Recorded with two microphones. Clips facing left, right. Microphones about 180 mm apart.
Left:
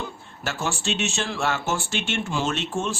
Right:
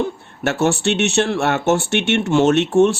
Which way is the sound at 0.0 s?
65° right (ahead or behind).